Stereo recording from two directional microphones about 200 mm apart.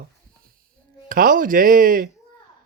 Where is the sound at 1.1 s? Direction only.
45° right (ahead or behind).